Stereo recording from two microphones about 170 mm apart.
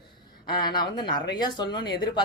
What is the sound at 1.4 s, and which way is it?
Speech, 25° left (ahead or behind).